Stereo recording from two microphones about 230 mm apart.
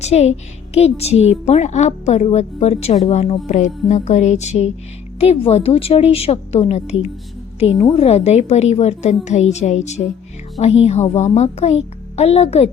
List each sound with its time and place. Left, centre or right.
0.0 s a woman's voice: left